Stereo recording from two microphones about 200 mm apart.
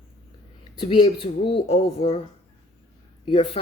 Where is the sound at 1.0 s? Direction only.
25° left (ahead or behind).